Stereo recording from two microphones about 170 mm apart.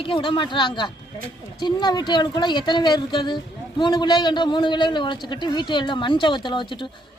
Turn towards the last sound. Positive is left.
turn(degrees=25)  # may be behind; listen again after turning